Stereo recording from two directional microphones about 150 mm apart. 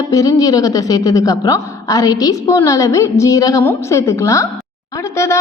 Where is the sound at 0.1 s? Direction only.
20° left (ahead or behind).